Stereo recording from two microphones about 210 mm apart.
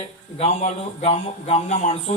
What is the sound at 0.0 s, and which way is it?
Speech, 30° left (ahead or behind).